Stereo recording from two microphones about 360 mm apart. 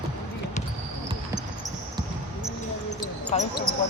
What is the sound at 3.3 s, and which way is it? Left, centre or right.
Speech, centre.